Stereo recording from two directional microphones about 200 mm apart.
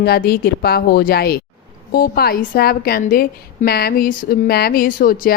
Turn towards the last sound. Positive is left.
turn(degrees=45)  # may be behind; listen again after turning